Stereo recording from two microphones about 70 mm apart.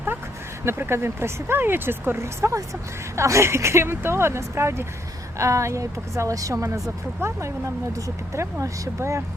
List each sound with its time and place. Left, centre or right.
0.6 s a woman's voice: right